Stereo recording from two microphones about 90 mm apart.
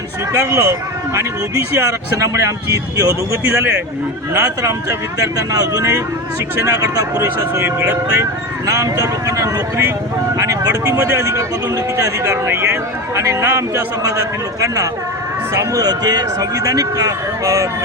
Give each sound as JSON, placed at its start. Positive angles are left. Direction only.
{"t": 0.3, "sound": "speech", "side_deg": -35}
{"t": 3.5, "sound": "speech", "side_deg": -25}
{"t": 4.4, "sound": "speech", "side_deg": -35}
{"t": 15.5, "sound": "speech", "side_deg": -40}